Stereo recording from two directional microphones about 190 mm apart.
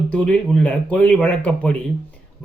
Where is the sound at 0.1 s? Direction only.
5° left (ahead or behind).